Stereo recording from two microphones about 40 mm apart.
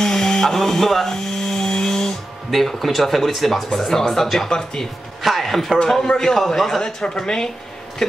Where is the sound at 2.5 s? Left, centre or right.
Centre.